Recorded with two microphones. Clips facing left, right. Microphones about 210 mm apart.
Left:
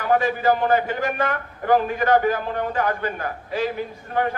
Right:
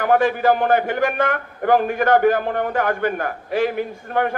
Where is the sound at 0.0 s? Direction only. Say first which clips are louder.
Right 3 dB; 60° right (ahead or behind).